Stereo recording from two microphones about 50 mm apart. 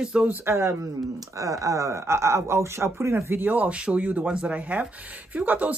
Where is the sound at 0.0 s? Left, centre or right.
Centre.